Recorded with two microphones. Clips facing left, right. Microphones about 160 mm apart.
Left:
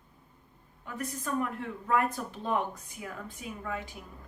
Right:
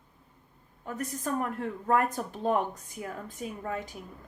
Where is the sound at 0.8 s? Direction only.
45° right (ahead or behind).